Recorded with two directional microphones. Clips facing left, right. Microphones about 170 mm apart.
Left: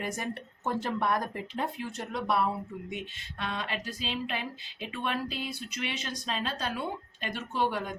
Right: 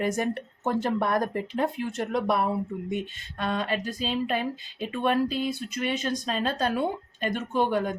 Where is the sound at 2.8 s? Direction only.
45° right (ahead or behind).